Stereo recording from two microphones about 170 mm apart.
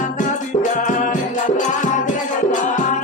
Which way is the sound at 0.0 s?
45° left (ahead or behind).